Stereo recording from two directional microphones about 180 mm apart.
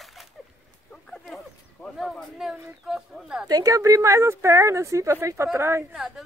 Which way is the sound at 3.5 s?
20° right (ahead or behind).